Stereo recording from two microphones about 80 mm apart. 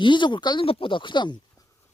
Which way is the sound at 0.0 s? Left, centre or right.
Left.